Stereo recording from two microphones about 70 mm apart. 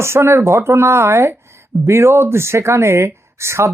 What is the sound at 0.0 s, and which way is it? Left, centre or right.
Speech, right.